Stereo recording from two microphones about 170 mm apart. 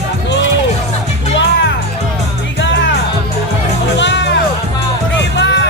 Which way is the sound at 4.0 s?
90° left.